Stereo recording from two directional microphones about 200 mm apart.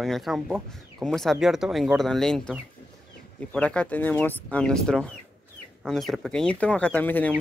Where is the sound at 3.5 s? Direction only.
5° left (ahead or behind).